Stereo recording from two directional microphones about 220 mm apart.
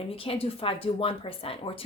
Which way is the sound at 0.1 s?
25° left (ahead or behind).